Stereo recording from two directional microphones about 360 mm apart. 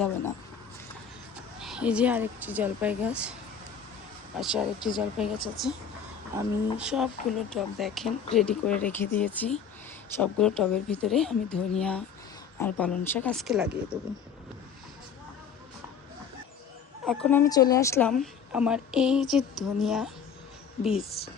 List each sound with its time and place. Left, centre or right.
1.6 s speech: centre
4.4 s speech: centre
17.1 s speech: centre
21.0 s a woman's voice: left